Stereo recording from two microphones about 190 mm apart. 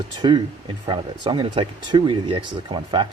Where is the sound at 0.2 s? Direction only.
25° right (ahead or behind).